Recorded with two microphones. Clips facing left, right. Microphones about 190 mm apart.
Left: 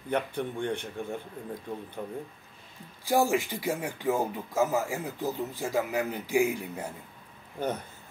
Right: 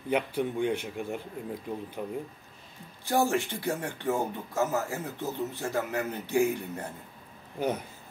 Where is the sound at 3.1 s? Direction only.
10° left (ahead or behind).